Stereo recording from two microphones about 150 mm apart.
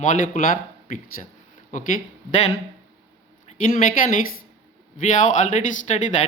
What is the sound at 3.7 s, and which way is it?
A man's voice, 65° left (ahead or behind).